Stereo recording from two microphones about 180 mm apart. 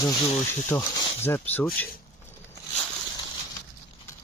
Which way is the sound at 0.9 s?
25° left (ahead or behind).